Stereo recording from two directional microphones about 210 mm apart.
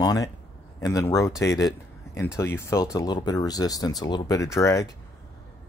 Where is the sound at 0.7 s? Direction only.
15° left (ahead or behind).